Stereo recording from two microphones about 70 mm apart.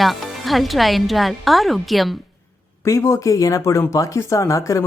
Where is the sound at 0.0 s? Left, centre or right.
Centre.